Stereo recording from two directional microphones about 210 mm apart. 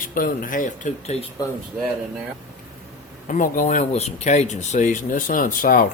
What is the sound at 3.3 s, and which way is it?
Speech, 40° left (ahead or behind).